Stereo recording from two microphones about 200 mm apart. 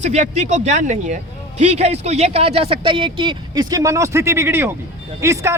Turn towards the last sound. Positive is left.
turn(degrees=-15)  # may be behind; listen again after turning